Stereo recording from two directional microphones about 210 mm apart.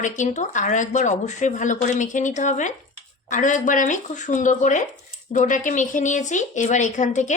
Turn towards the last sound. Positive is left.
turn(degrees=35)  # may be behind; listen again after turning